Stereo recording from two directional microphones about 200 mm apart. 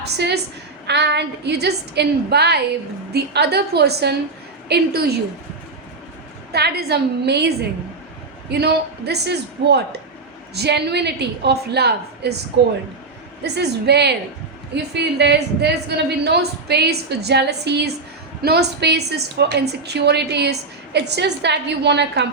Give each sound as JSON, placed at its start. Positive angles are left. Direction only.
{"t": 0.0, "sound": "a woman's voice", "side_deg": -55}
{"t": 6.5, "sound": "a woman's voice", "side_deg": -55}
{"t": 13.4, "sound": "a woman's voice", "side_deg": -55}